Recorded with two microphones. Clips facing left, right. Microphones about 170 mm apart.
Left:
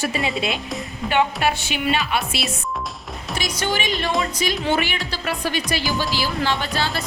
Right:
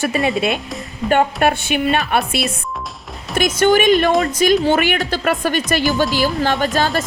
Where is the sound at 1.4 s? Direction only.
55° right (ahead or behind).